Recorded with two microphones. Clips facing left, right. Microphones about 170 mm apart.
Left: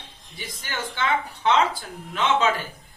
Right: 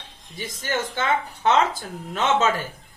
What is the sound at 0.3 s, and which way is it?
Speech, 45° right (ahead or behind).